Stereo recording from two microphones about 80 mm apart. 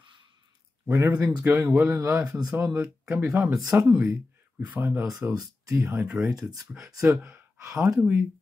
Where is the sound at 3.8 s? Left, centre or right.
Centre; by 6.0 s right.